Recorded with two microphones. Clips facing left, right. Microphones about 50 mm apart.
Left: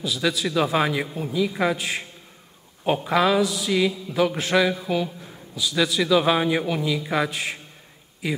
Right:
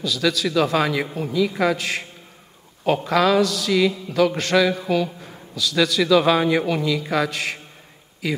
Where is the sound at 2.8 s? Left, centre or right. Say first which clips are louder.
Right 2 dB; centre.